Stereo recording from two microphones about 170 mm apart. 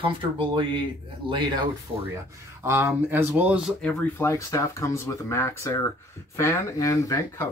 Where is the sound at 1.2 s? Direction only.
30° right (ahead or behind).